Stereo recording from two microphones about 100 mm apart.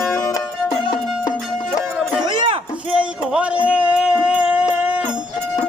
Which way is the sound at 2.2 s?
55° right (ahead or behind).